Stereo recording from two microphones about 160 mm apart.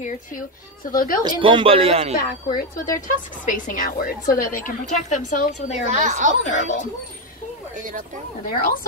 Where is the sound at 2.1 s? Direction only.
60° left (ahead or behind).